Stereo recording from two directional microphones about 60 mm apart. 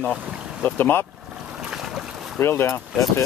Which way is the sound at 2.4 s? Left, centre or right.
Left.